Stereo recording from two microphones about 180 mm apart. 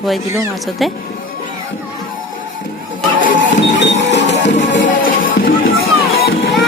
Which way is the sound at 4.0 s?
80° left.